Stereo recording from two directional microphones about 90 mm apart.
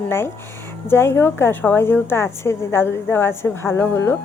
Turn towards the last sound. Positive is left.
turn(degrees=25)  # may be behind; listen again after turning